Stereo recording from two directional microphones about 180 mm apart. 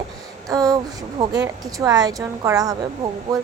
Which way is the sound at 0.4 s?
20° right (ahead or behind).